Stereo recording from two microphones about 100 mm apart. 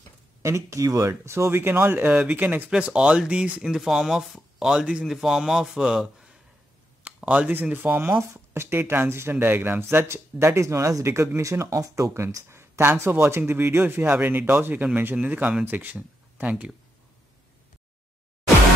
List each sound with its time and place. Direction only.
0.4 s speech: 30° right (ahead or behind); by 16.7 s 15° right (ahead or behind)